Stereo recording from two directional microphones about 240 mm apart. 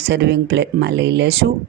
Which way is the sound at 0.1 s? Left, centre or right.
Right.